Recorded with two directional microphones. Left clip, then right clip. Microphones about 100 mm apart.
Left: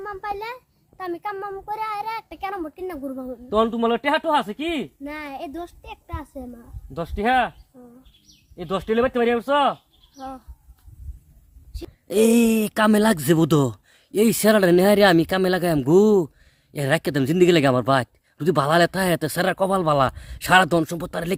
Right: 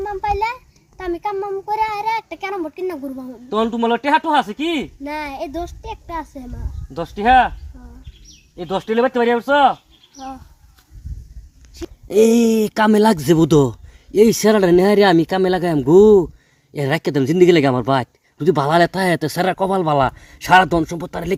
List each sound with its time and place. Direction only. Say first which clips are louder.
0.0 s a child's voice: right 9 dB; 15° left (ahead or behind)
3.5 s speech: right 2 dB; 35° left (ahead or behind)
5.0 s a child's voice: right 6 dB; 5° left (ahead or behind)
6.9 s speech: right 7 dB; 45° left (ahead or behind)
8.5 s speech: right 3 dB; 40° left (ahead or behind)
11.7 s speech: right 6 dB; 25° left (ahead or behind)